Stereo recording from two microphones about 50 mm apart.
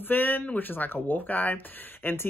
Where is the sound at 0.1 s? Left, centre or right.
Left.